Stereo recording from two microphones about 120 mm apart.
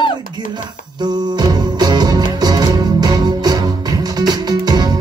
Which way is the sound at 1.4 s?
35° right (ahead or behind).